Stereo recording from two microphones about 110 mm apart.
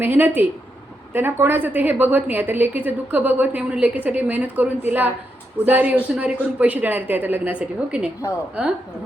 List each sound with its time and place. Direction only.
0.0 s a woman's voice: 15° right (ahead or behind)